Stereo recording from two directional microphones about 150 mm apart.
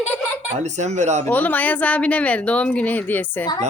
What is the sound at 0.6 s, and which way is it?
Speech, 50° right (ahead or behind).